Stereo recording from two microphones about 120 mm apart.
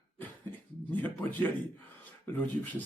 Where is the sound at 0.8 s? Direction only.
15° left (ahead or behind).